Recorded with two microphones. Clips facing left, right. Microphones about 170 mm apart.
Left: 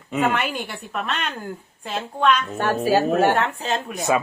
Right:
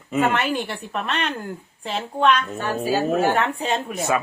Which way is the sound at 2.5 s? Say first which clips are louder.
Left 3 dB; 65° left (ahead or behind).